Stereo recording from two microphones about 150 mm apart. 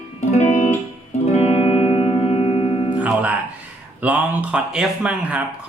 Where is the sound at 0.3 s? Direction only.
50° left (ahead or behind).